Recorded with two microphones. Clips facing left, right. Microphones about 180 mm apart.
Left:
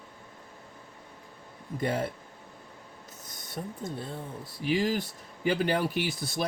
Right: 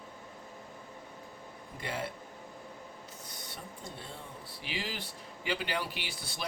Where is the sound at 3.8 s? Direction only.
50° left (ahead or behind).